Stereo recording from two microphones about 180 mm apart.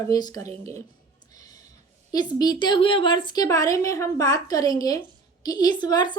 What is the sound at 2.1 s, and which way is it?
A woman's voice, 20° left (ahead or behind).